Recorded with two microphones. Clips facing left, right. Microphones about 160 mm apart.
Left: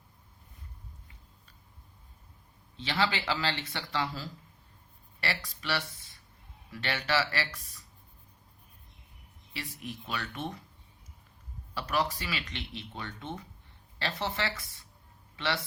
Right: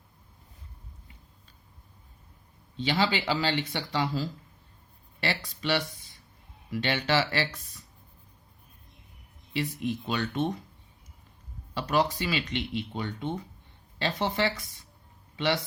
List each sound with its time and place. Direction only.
2.9 s speech: 20° right (ahead or behind)
9.5 s speech: 20° right (ahead or behind)
11.8 s speech: 20° right (ahead or behind)